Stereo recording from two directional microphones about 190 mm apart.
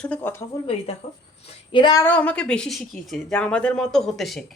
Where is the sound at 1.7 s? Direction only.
25° left (ahead or behind).